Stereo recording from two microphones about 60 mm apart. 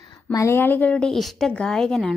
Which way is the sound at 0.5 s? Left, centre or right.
Left.